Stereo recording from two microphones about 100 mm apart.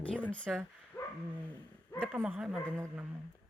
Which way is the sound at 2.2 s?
10° right (ahead or behind).